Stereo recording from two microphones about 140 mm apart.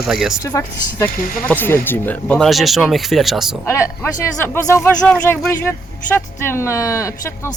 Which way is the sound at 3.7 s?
20° left (ahead or behind).